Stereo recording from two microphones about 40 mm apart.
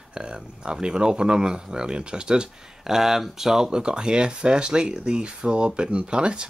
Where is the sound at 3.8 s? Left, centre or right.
Right.